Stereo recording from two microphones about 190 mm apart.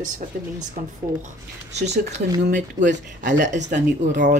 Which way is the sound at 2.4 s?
45° right (ahead or behind).